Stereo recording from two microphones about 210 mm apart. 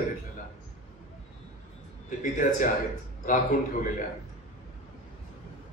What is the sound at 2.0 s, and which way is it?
Speech, 40° left (ahead or behind).